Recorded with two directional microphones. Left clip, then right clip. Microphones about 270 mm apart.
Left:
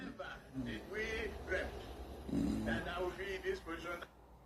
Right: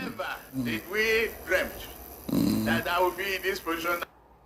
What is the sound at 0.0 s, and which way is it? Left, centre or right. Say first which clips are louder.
A man's voice: right 13 dB; right.